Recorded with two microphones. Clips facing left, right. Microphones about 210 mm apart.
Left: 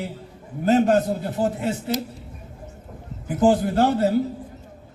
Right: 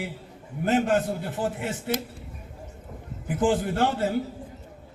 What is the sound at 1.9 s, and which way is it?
Speech, 55° right (ahead or behind).